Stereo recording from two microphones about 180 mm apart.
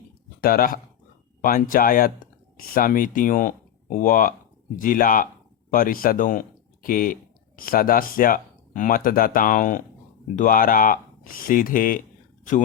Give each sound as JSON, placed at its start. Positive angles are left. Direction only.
{"t": 0.4, "sound": "speech", "side_deg": 50}